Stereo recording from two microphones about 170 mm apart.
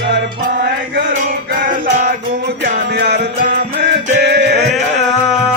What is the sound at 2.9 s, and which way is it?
Music, 70° right (ahead or behind).